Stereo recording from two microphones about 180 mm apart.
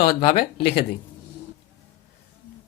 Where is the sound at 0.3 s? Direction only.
55° left (ahead or behind).